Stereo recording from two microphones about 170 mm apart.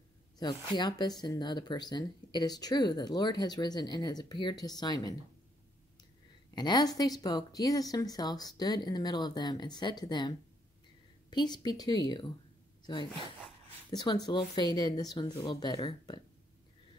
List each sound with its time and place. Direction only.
0.4 s speech: 25° left (ahead or behind)
6.5 s speech: 25° left (ahead or behind)